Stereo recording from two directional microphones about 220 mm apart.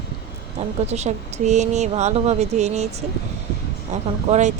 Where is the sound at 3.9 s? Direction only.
30° right (ahead or behind).